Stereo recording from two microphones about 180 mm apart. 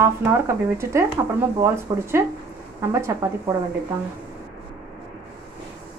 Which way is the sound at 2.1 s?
15° right (ahead or behind).